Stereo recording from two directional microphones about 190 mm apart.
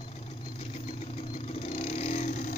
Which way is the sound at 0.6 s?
35° left (ahead or behind).